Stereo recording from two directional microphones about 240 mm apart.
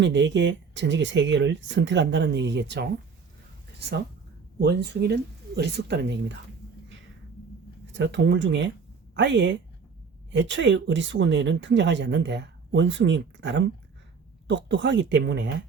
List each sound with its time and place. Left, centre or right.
0.0 s speech: right
7.9 s speech: right